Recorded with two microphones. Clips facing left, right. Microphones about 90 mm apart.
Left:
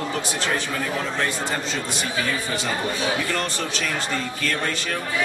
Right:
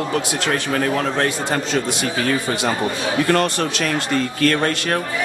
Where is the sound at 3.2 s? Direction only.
55° right (ahead or behind).